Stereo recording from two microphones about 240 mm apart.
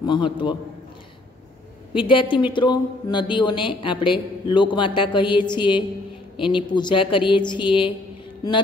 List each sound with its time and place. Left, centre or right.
0.0 s speech: centre
2.0 s speech: left